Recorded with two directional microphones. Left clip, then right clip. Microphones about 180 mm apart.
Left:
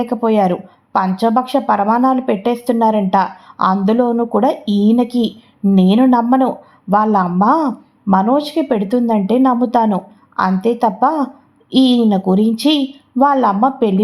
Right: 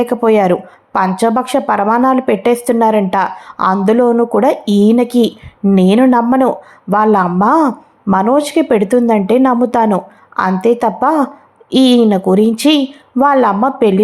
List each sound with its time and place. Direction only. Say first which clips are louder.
0.0 s a woman's voice: right 4 dB; 15° right (ahead or behind)